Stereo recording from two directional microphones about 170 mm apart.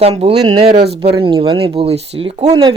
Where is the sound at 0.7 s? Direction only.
70° right (ahead or behind).